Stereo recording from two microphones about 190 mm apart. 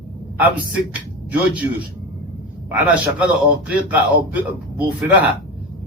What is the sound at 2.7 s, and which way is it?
A man's voice, 5° right (ahead or behind).